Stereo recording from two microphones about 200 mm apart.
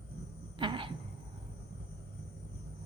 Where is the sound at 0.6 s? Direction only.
25° right (ahead or behind).